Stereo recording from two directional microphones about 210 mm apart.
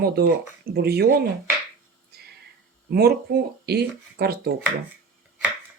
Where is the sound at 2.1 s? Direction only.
50° right (ahead or behind).